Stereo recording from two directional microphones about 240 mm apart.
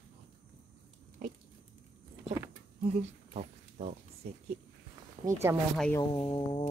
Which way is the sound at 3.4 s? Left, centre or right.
Right.